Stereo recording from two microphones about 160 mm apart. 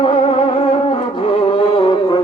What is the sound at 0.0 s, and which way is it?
Music, 35° left (ahead or behind).